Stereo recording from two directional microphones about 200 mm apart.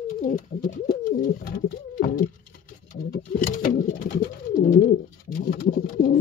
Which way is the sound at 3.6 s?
45° left (ahead or behind).